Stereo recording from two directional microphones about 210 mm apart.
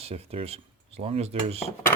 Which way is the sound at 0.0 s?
30° right (ahead or behind).